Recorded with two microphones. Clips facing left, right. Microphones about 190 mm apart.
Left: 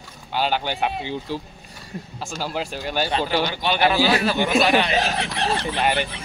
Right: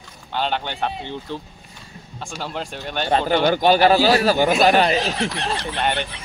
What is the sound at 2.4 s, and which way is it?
Speech, 5° left (ahead or behind).